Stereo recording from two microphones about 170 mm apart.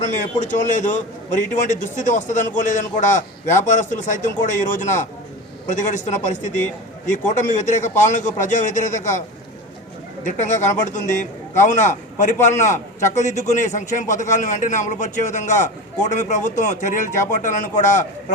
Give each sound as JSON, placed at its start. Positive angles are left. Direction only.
{"t": 0.0, "sound": "a man's voice", "side_deg": 45}
{"t": 6.2, "sound": "a man's voice", "side_deg": 45}
{"t": 10.2, "sound": "a man's voice", "side_deg": 45}